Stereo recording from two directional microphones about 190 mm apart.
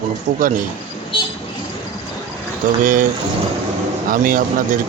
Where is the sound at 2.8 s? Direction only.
45° right (ahead or behind).